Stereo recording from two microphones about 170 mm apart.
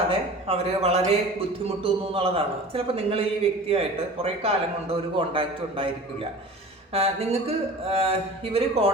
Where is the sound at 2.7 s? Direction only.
35° right (ahead or behind).